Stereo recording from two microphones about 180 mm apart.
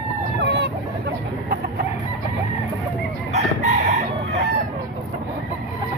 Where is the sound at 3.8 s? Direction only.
35° right (ahead or behind).